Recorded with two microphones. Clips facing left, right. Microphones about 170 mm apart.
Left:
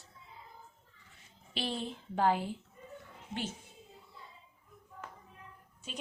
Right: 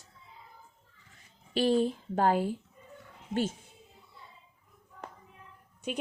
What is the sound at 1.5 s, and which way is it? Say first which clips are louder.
Speech: right 11 dB; 45° right (ahead or behind).